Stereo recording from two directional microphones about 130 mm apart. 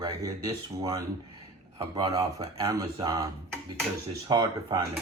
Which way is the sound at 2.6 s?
25° right (ahead or behind).